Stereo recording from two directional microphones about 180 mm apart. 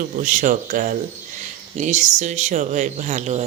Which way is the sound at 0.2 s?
45° right (ahead or behind).